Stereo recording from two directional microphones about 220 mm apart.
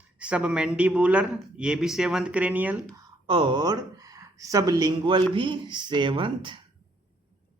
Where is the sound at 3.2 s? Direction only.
25° right (ahead or behind).